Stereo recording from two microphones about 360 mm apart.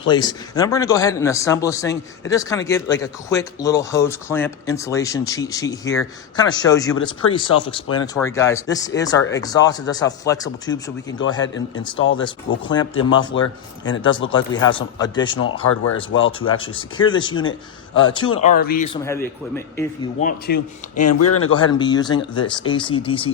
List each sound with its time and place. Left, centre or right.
0.0 s speech: centre
11.9 s speech: left
12.6 s speech: centre
13.0 s speech: left
14.6 s speech: centre
15.6 s speech: left
16.1 s speech: left
16.7 s speech: centre
19.0 s speech: centre
20.1 s speech: left
21.0 s speech: left
21.8 s speech: centre